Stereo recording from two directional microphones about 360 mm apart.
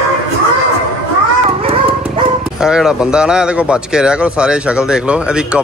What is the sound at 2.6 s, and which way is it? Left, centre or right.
Speech, centre.